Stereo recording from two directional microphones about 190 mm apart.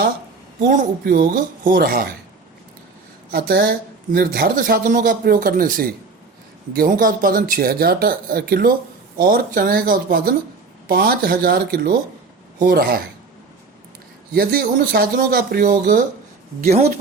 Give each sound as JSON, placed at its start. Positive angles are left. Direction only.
{"t": 0.7, "sound": "speech", "side_deg": -50}
{"t": 3.3, "sound": "speech", "side_deg": -55}
{"t": 14.3, "sound": "speech", "side_deg": -55}
{"t": 15.7, "sound": "a woman's voice", "side_deg": -40}